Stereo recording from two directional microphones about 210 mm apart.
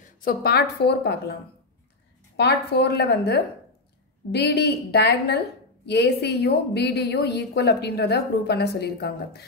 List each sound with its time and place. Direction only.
0.0 s a woman's voice: 40° left (ahead or behind)
2.3 s a woman's voice: 50° left (ahead or behind)